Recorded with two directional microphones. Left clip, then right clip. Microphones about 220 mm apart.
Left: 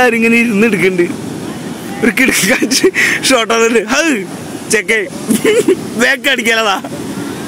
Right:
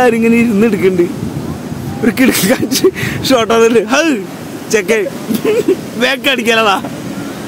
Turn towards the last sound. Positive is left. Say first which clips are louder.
# right 1 dB
turn(degrees=20)  # may be behind; listen again after turning